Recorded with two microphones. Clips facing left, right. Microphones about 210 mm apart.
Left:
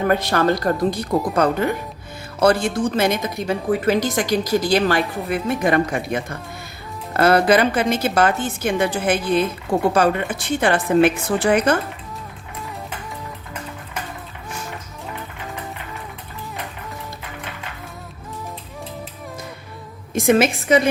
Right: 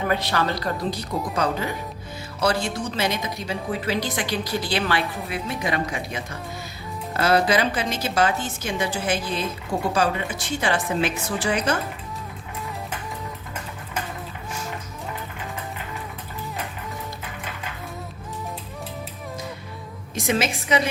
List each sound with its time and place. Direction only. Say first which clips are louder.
0.1 s a woman's voice: left 6 dB; 50° left (ahead or behind)
20.1 s a woman's voice: left 8 dB; 55° left (ahead or behind)